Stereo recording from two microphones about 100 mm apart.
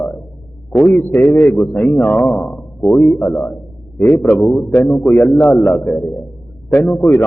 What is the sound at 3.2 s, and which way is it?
A man's voice, 15° left (ahead or behind).